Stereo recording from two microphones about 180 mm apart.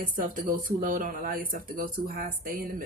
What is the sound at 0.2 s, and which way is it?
Speech, 45° right (ahead or behind).